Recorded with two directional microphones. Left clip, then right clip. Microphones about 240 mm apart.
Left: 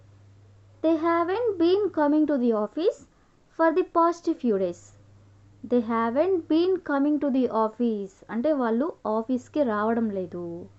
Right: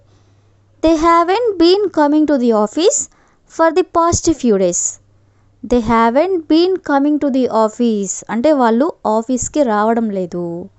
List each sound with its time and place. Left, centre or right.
0.8 s speech: right